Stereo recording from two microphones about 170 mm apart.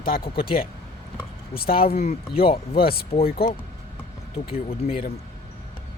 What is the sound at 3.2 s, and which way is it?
Speech, 60° left (ahead or behind).